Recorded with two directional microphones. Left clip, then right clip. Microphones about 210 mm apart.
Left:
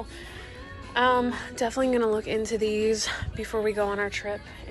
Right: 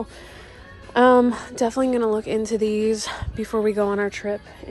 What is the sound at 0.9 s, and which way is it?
A woman's voice, 30° right (ahead or behind).